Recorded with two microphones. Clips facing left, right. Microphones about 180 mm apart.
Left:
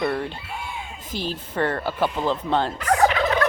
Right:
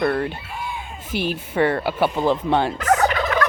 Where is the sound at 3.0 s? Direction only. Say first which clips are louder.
Left 1 dB; 30° left (ahead or behind).